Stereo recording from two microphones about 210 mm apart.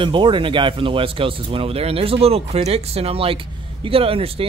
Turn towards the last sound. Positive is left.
turn(degrees=-25)  # may be behind; listen again after turning